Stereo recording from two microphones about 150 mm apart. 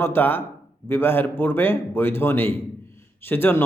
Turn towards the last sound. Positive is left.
turn(degrees=15)  # may be behind; listen again after turning